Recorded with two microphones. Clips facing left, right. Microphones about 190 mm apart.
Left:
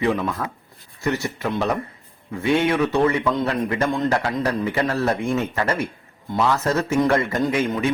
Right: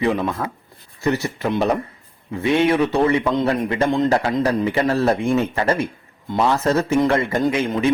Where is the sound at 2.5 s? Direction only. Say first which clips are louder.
Right 2 dB; 30° right (ahead or behind).